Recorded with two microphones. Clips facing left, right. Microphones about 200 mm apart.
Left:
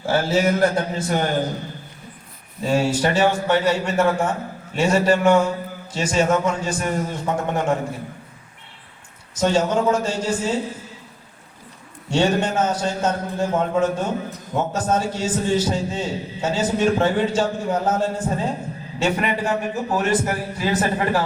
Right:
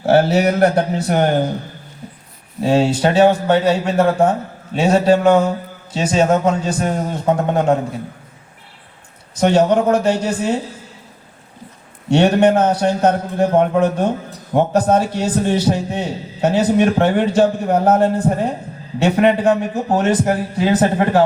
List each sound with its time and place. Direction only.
0.0 s a man's voice: 65° right (ahead or behind)
2.6 s a man's voice: 85° right; by 7.8 s 60° right (ahead or behind)
9.4 s a man's voice: 60° right (ahead or behind)
12.1 s a man's voice: 60° right (ahead or behind)